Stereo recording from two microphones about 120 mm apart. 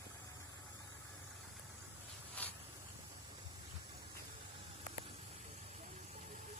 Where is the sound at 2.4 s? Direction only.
10° left (ahead or behind).